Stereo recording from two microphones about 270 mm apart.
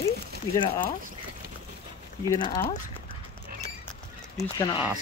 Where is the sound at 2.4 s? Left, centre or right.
Centre.